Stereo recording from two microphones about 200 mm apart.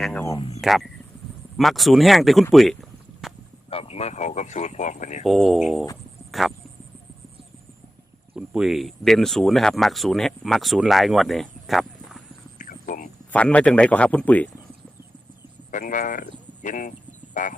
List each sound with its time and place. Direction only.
0.0 s speech: 5° left (ahead or behind)
0.3 s speech: 25° left (ahead or behind)
0.6 s speech: centre (ahead or behind)
3.2 s a sound: centre (ahead or behind)
3.7 s speech: 30° left (ahead or behind)
5.2 s speech: centre (ahead or behind)
8.4 s speech: 5° right (ahead or behind)
12.5 s a sound: 40° left (ahead or behind)
13.3 s speech: 5° left (ahead or behind)
15.7 s speech: 40° left (ahead or behind)